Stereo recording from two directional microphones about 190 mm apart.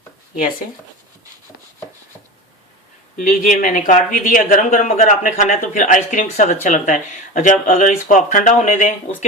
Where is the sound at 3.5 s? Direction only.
45° left (ahead or behind).